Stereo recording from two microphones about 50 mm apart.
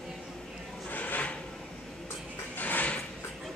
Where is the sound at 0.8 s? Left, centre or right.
Left.